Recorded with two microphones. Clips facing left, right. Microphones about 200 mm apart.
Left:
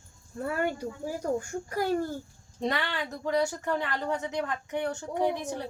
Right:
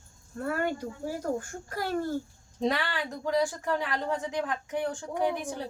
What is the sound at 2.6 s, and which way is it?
Speech, centre (ahead or behind).